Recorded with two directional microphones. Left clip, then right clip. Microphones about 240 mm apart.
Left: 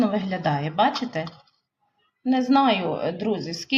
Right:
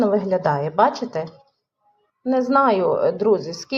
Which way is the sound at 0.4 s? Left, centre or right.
Centre.